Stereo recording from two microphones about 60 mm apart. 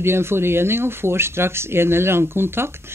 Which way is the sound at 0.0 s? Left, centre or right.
Right.